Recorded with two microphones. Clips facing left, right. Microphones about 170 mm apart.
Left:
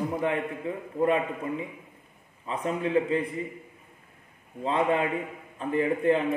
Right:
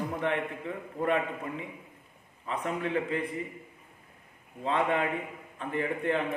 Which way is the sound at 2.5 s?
35° left (ahead or behind).